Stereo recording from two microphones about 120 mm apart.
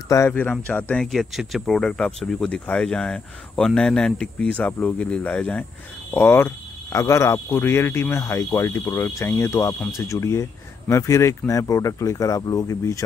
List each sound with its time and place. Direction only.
0.3 s speech: 15° left (ahead or behind)
1.0 s speech: centre (ahead or behind); by 13.0 s 25° left (ahead or behind)